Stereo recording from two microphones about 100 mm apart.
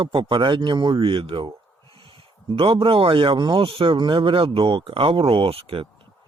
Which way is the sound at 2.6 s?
60° right (ahead or behind).